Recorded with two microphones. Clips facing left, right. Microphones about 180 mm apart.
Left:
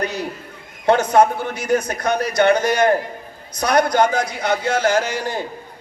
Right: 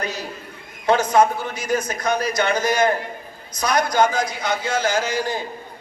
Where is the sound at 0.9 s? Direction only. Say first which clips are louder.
Left 2 dB; 60° left (ahead or behind).